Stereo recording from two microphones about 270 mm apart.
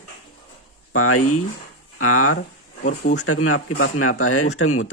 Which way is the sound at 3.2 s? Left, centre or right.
Left.